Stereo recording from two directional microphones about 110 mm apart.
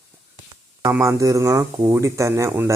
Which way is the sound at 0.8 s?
25° right (ahead or behind).